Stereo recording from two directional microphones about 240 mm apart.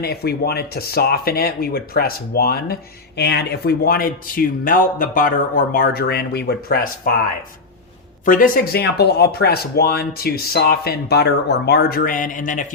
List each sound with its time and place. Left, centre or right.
0.0 s speech: left
8.2 s speech: left